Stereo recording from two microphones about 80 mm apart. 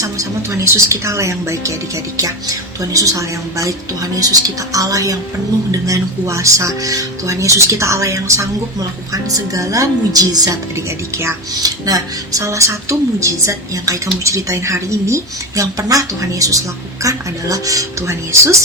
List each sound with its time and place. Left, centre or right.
0.0 s speech: right
2.9 s speech: right
11.6 s speech: right